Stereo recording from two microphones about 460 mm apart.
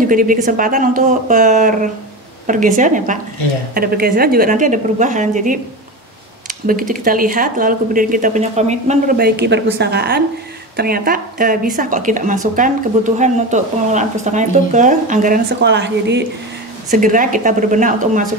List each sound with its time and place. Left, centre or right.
0.0 s a woman's voice: centre